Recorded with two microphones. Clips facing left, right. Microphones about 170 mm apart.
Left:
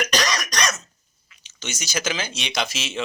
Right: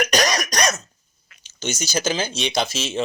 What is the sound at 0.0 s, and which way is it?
Cough, 45° right (ahead or behind).